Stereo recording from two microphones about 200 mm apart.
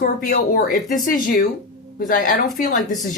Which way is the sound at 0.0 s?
45° left (ahead or behind).